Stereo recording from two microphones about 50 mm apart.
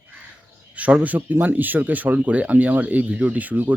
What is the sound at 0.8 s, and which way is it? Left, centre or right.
Speech, right.